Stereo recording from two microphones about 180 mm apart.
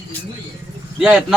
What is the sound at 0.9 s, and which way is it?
Speech, centre (ahead or behind).